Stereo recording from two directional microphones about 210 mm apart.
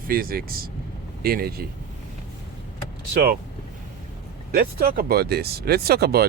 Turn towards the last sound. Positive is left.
turn(degrees=-45)  # may be behind; listen again after turning